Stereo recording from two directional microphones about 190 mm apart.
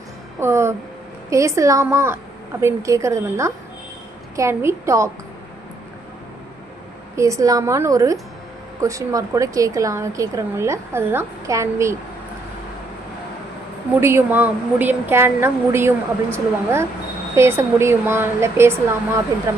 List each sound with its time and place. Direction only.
0.3 s a woman's voice: 15° right (ahead or behind)
7.2 s a woman's voice: 15° right (ahead or behind)
13.9 s a woman's voice: 15° right (ahead or behind)